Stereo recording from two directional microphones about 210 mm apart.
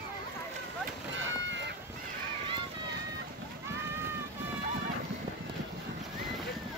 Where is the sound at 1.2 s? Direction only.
65° right (ahead or behind).